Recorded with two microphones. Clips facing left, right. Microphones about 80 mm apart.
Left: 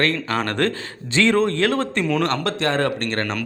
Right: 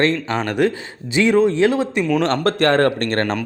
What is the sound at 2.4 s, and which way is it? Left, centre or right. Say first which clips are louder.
Speech: right 6 dB; right.